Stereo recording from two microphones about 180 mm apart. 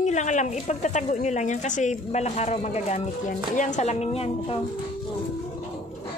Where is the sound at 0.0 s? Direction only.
40° left (ahead or behind).